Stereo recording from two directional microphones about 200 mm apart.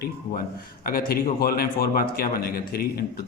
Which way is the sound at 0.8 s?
45° left (ahead or behind).